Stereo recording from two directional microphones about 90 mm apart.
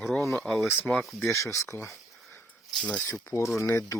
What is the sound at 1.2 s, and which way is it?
Speech, 35° left (ahead or behind).